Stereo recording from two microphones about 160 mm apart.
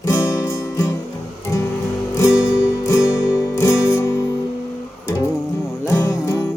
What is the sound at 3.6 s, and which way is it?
Music, 15° left (ahead or behind).